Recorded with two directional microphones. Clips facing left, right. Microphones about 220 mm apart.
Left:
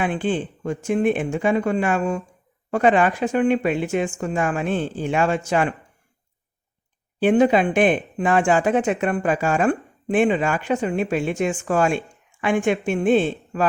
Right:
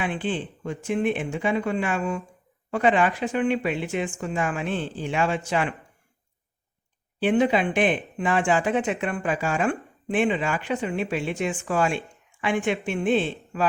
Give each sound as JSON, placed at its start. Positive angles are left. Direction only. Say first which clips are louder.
{"t": 0.0, "sound": "speech", "louder": "left 5 dB", "side_deg": 45}
{"t": 7.2, "sound": "speech", "louder": "left 5 dB", "side_deg": 45}